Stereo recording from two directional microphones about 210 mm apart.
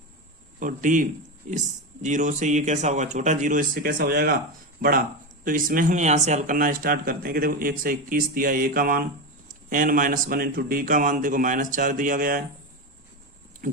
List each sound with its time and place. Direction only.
0.6 s speech: 40° right (ahead or behind)